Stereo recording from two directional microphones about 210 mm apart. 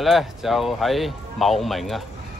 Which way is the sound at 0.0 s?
Centre (ahead or behind).